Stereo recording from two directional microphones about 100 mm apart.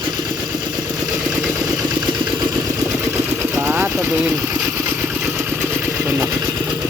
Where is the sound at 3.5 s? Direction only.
25° right (ahead or behind).